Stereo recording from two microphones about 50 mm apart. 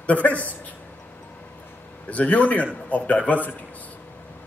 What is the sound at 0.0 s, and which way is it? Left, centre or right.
Speech, left.